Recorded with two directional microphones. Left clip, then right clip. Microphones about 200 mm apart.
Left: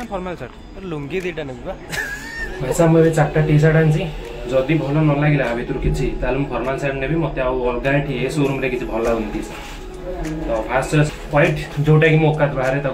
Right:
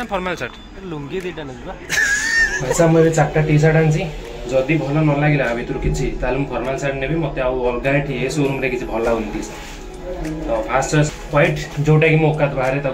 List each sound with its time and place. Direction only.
0.1 s speech: 10° right (ahead or behind)
1.9 s vehicle: 5° right (ahead or behind)
2.8 s a man's voice: 5° right (ahead or behind)
10.7 s a man's voice: 5° right (ahead or behind)